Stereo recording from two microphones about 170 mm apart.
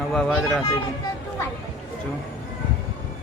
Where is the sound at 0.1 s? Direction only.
Centre (ahead or behind).